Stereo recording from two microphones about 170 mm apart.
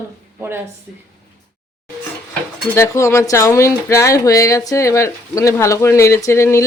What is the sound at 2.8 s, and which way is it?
Speech, 15° left (ahead or behind).